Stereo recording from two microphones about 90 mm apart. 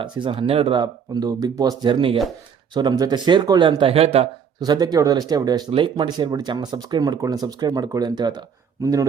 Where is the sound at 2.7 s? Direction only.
55° right (ahead or behind); by 4.0 s 80° right.